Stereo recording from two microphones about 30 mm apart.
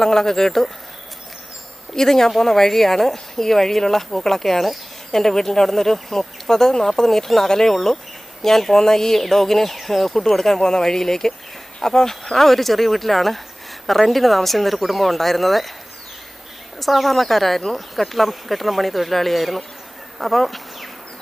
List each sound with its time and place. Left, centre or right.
0.0 s speech: centre
2.0 s speech: centre
12.5 s speech: centre
16.8 s speech: centre
20.1 s bee: centre